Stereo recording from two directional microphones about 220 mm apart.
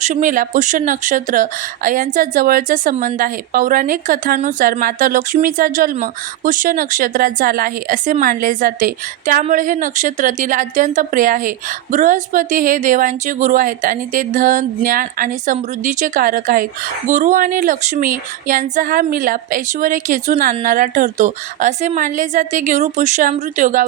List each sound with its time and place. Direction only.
0.0 s speech: 35° right (ahead or behind)